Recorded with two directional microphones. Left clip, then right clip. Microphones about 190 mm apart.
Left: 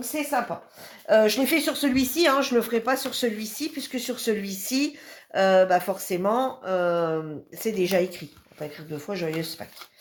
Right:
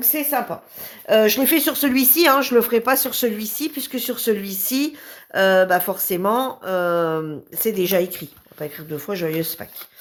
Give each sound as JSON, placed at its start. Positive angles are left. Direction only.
{"t": 0.0, "sound": "speech", "side_deg": -40}